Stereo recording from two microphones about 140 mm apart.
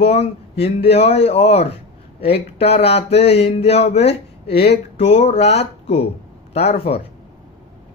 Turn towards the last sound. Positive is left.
turn(degrees=50)  # may be behind; listen again after turning